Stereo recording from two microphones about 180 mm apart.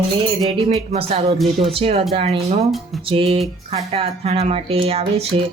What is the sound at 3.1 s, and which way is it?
Speech, 30° right (ahead or behind).